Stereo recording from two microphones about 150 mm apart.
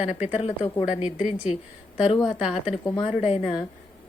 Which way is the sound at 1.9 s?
40° left (ahead or behind).